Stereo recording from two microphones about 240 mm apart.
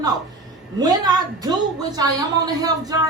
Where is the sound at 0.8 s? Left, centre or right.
Centre.